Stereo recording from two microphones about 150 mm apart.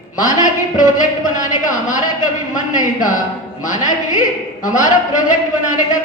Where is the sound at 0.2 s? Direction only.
60° left (ahead or behind).